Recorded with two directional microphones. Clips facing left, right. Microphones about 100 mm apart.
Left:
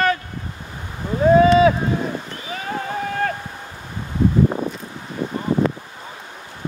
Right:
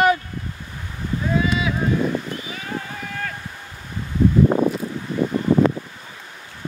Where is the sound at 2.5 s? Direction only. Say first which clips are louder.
Left 4 dB; 40° left (ahead or behind).